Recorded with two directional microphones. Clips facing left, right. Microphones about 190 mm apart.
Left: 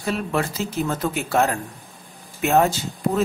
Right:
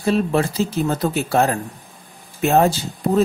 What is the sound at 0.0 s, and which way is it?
A woman's voice, 30° right (ahead or behind).